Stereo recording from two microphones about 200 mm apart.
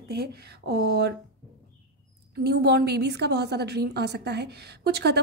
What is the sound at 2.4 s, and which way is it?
A woman's voice, 55° right (ahead or behind).